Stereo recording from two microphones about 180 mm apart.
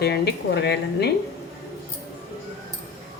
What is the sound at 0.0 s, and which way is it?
Speech, 65° left (ahead or behind).